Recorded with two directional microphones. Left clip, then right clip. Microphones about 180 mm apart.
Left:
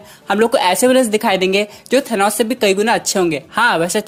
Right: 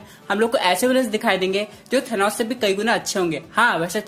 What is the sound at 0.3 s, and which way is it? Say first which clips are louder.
Speech: left 5 dB; 40° left (ahead or behind).